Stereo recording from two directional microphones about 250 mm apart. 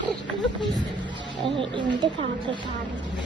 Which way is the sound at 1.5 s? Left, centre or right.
Centre.